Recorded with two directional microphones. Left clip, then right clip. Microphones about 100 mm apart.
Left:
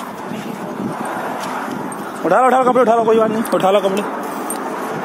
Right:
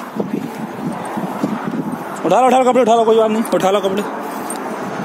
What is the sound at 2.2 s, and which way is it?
A man's voice, 40° right (ahead or behind).